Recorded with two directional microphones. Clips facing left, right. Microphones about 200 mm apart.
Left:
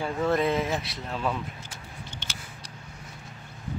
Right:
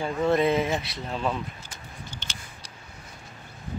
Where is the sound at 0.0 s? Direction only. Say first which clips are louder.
Right 2 dB; centre (ahead or behind).